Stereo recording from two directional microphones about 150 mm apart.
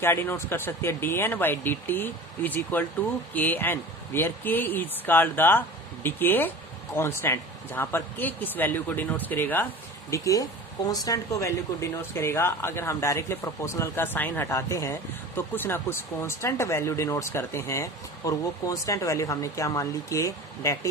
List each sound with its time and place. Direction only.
0.0 s speech: 15° left (ahead or behind)